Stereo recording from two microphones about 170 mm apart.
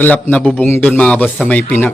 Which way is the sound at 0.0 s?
10° left (ahead or behind).